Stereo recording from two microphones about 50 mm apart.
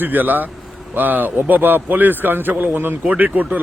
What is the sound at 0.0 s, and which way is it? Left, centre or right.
A man's voice, right.